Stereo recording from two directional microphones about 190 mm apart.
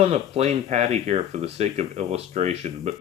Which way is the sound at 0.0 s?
35° right (ahead or behind).